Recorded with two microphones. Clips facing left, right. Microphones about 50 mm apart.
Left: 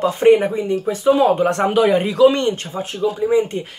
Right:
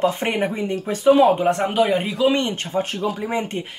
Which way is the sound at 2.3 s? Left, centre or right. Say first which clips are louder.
Left 1 dB; right.